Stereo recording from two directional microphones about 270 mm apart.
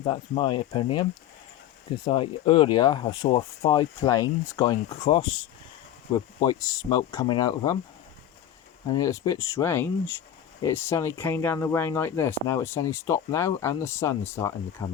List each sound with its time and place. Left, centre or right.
0.0 s speech: centre
2.0 s speech: centre
8.9 s speech: centre